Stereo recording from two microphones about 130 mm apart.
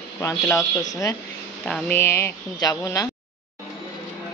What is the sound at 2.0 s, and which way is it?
Speech, 20° left (ahead or behind).